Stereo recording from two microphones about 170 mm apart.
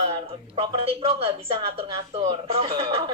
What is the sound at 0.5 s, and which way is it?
Speech, 35° right (ahead or behind).